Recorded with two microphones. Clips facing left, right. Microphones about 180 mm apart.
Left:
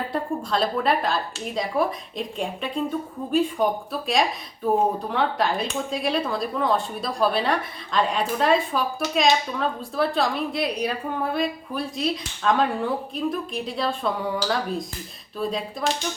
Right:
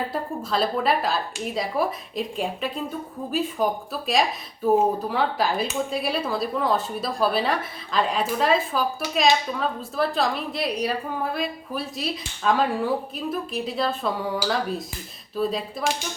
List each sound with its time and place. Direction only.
0.1 s speech: centre (ahead or behind)